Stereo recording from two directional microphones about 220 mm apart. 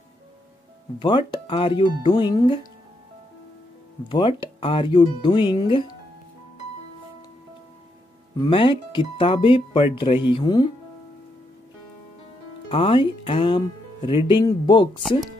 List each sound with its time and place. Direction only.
0.9 s speech: 20° left (ahead or behind)
4.1 s speech: 20° left (ahead or behind)
8.4 s speech: 20° left (ahead or behind)
12.6 s speech: 25° left (ahead or behind)